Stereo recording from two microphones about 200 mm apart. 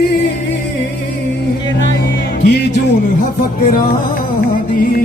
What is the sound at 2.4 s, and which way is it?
Music, 55° left (ahead or behind).